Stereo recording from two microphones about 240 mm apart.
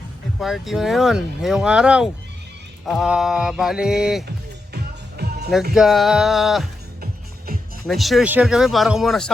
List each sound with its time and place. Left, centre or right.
0.3 s speech: centre
4.3 s music: right
5.7 s speech: centre
7.0 s music: right
7.9 s speech: centre